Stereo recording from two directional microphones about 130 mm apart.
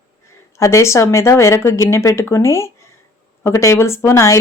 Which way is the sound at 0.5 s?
20° left (ahead or behind).